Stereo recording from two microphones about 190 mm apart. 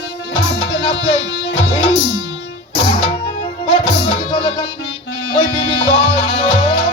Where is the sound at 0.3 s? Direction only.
25° left (ahead or behind).